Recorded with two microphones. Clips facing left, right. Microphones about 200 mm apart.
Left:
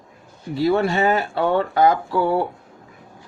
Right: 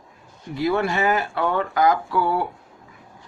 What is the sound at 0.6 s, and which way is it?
Speech, 30° left (ahead or behind).